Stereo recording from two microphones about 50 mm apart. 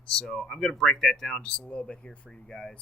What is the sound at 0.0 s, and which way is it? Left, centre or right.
Speech, centre.